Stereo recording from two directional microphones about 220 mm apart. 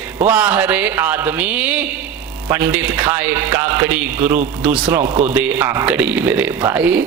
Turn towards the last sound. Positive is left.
turn(degrees=-5)  # may be behind; listen again after turning